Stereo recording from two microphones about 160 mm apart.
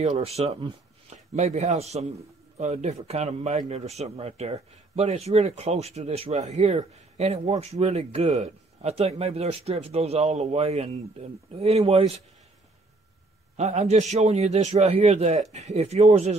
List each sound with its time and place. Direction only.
0.4 s speech: 35° right (ahead or behind)
1.1 s a man's voice: 45° right (ahead or behind)
13.6 s a man's voice: 45° right (ahead or behind)